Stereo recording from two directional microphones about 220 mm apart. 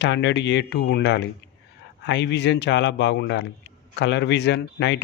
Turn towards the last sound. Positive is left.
turn(degrees=50)  # may be behind; listen again after turning